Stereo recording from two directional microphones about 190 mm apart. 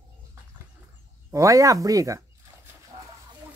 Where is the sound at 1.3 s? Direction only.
15° right (ahead or behind).